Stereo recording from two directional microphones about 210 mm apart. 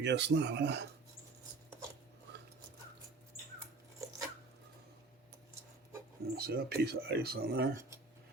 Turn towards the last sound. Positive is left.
turn(degrees=-50)  # may be behind; listen again after turning